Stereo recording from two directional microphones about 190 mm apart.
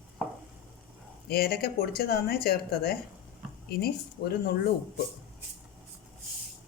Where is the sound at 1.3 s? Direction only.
55° left (ahead or behind).